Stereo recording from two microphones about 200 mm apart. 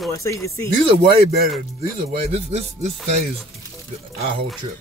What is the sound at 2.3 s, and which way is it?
Speech, 30° right (ahead or behind).